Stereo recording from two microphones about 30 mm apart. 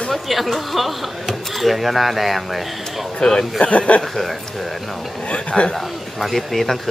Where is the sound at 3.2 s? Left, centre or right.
Left.